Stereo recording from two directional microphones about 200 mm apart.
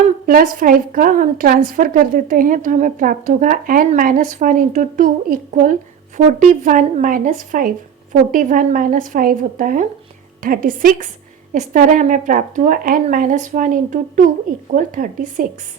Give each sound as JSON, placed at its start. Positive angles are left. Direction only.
{"t": 0.3, "sound": "a woman's voice", "side_deg": -45}